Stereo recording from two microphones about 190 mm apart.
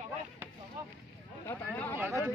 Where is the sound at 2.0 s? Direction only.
Centre (ahead or behind).